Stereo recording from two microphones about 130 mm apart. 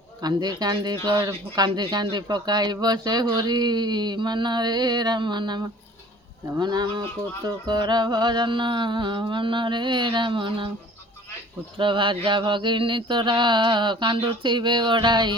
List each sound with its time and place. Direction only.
0.2 s speech: 30° right (ahead or behind)
11.8 s speech: 40° right (ahead or behind)